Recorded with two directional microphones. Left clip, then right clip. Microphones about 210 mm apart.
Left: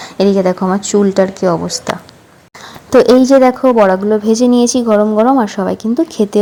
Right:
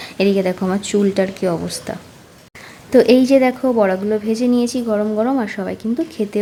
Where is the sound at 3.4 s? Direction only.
Centre (ahead or behind).